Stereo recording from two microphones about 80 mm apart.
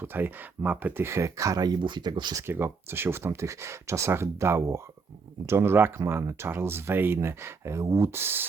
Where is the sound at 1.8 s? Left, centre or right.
Right.